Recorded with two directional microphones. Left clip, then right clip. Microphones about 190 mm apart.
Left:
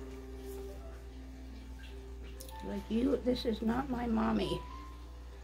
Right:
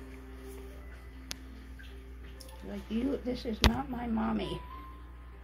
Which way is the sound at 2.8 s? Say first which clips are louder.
Left 2 dB; 25° left (ahead or behind).